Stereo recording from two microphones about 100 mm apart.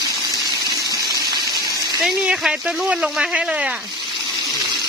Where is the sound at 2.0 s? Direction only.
5° right (ahead or behind).